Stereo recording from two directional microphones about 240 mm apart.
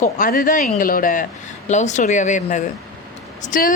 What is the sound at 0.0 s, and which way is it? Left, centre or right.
A woman's voice, left.